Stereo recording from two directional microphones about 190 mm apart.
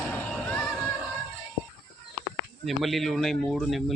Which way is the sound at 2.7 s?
Centre (ahead or behind).